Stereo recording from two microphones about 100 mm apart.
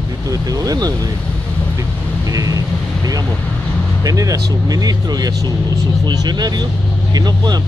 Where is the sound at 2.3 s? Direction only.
35° right (ahead or behind).